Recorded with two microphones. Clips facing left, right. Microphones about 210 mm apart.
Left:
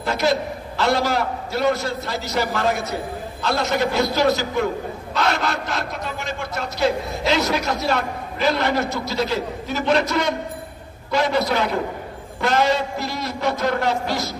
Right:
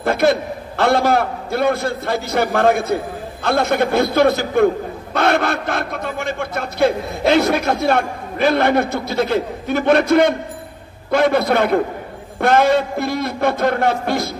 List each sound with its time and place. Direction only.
0.0 s a man's voice: 55° right (ahead or behind)